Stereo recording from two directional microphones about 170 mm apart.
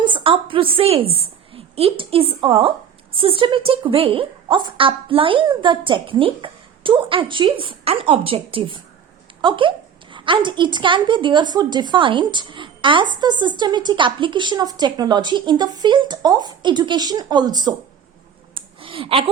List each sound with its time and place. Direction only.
0.0 s a woman's voice: 30° right (ahead or behind)
18.5 s clicking: 30° right (ahead or behind)